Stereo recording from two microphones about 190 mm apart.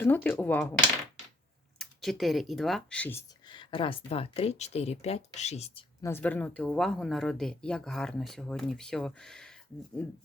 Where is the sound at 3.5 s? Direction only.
25° left (ahead or behind).